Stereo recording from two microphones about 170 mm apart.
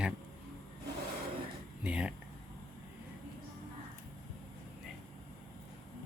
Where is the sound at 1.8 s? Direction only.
5° right (ahead or behind).